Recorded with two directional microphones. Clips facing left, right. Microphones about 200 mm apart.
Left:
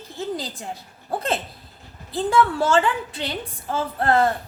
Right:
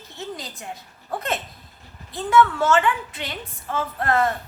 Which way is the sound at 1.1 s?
30° left (ahead or behind).